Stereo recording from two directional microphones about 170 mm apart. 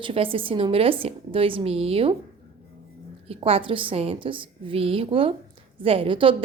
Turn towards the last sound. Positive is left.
turn(degrees=-30)  # may be behind; listen again after turning